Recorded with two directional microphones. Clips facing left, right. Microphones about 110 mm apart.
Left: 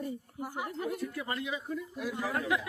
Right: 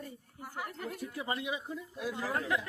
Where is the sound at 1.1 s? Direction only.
20° right (ahead or behind).